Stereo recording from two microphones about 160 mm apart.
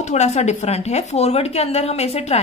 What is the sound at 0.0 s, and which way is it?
A woman's voice, 45° left (ahead or behind).